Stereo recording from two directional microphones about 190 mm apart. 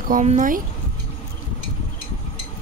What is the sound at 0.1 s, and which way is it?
Speech, 40° right (ahead or behind).